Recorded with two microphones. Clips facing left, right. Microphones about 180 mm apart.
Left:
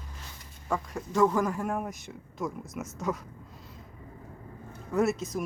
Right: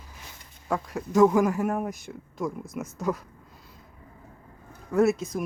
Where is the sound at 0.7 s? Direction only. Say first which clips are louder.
Right 4 dB; 5° right (ahead or behind).